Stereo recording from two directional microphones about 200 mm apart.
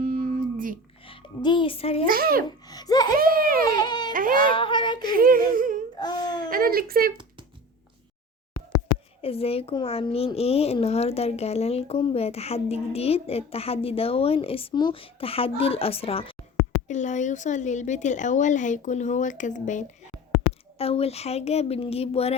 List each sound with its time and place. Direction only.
0.0 s a sound: 45° right (ahead or behind)
1.0 s a child's voice: 25° left (ahead or behind)
2.0 s a child's voice: 45° right (ahead or behind)
2.6 s laughter: 20° left (ahead or behind)
3.2 s a sound: 45° right (ahead or behind)
3.8 s baby cry: 20° left (ahead or behind)
4.1 s baby cry: 45° right (ahead or behind)
4.5 s a sound: 25° left (ahead or behind)
5.1 s a sound: 45° right (ahead or behind)
6.0 s baby cry: 20° left (ahead or behind)
6.5 s speech: 45° right (ahead or behind)
9.2 s a child's voice: 30° left (ahead or behind)